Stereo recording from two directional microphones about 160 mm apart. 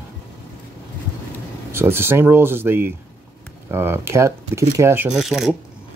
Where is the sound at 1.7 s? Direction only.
15° right (ahead or behind).